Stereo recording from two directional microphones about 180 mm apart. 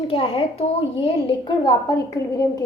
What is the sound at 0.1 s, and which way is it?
A woman's voice, 30° left (ahead or behind).